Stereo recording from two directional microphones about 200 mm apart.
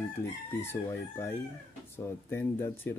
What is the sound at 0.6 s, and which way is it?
Speech, 15° left (ahead or behind).